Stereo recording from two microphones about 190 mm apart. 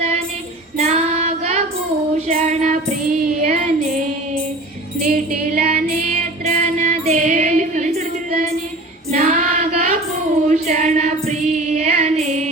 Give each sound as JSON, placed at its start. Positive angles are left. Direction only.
{"t": 0.8, "sound": "child singing", "side_deg": -35}
{"t": 2.2, "sound": "music", "side_deg": -35}
{"t": 5.1, "sound": "female singing", "side_deg": -50}
{"t": 9.1, "sound": "child singing", "side_deg": -40}
{"t": 10.5, "sound": "female singing", "side_deg": -40}